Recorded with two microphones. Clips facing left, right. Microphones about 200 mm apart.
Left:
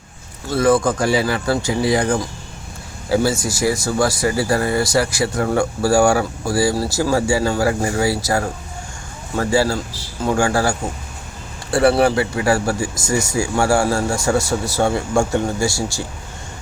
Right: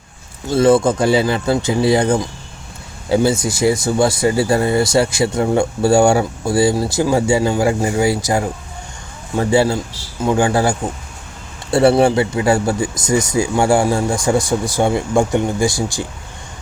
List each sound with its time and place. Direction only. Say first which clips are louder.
0.5 s speech: right 3 dB; 25° right (ahead or behind)